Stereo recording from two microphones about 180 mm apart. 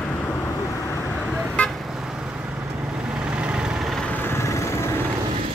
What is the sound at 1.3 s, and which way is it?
Vehicle, 5° left (ahead or behind).